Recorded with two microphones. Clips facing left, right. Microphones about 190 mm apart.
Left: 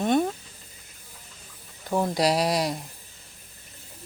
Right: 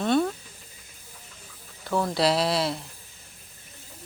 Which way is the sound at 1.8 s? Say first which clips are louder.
Even; 15° left (ahead or behind).